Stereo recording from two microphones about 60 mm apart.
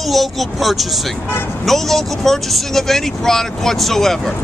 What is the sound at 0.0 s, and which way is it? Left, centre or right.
Speech, centre.